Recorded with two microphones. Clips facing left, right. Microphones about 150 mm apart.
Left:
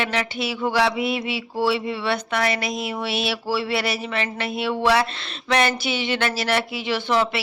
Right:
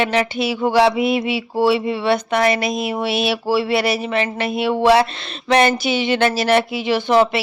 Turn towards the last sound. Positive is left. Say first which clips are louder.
# right 6 dB
turn(degrees=-15)  # may be behind; listen again after turning